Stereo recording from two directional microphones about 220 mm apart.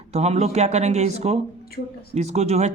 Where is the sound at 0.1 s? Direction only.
30° right (ahead or behind).